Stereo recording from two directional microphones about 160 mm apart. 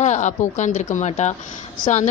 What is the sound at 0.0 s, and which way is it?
Speech, 50° left (ahead or behind).